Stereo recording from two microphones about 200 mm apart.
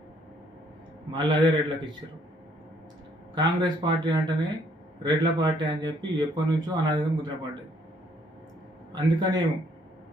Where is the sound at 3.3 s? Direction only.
20° right (ahead or behind).